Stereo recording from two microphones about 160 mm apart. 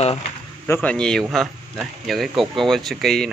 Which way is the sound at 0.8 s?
5° left (ahead or behind).